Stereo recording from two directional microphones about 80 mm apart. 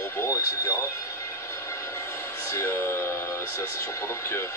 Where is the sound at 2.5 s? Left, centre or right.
Left.